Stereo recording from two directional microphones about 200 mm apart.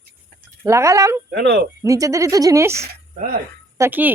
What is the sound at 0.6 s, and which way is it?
Speech, 15° right (ahead or behind).